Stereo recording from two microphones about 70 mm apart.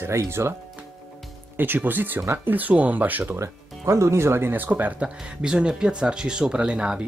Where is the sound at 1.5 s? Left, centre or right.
Right.